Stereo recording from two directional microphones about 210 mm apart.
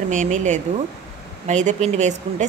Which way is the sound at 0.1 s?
35° right (ahead or behind).